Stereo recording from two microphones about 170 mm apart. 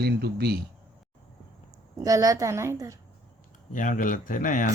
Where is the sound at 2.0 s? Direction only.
20° right (ahead or behind).